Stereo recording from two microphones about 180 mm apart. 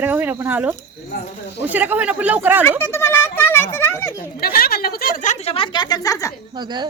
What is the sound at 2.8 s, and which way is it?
Speech, 15° left (ahead or behind).